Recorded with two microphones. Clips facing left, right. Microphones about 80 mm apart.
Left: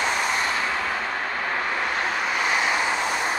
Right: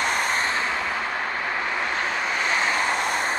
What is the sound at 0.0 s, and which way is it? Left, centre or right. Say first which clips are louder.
Vehicle: even; right.